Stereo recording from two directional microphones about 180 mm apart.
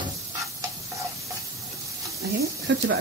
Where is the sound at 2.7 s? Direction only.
75° right (ahead or behind).